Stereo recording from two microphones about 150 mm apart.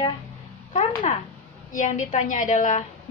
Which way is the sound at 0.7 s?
45° left (ahead or behind).